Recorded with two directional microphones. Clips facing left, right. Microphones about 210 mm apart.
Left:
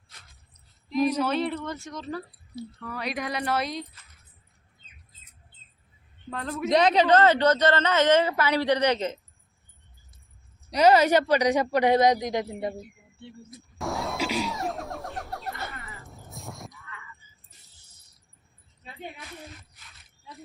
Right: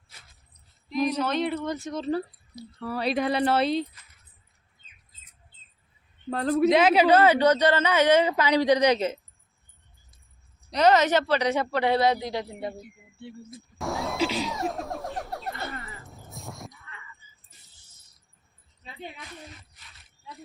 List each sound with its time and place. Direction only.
0.9 s keys jangling: 5° left (ahead or behind)
1.5 s a man's voice: 10° right (ahead or behind)
1.9 s speech: 30° right (ahead or behind)
6.3 s a man's voice: 35° right (ahead or behind)
6.7 s a man's voice: 5° right (ahead or behind)
10.7 s a man's voice: 10° left (ahead or behind)
13.7 s a sound: centre (ahead or behind)
14.4 s music: centre (ahead or behind)
16.0 s a sound: centre (ahead or behind)